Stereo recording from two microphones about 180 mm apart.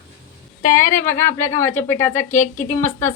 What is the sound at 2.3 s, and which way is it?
Speech, 45° left (ahead or behind).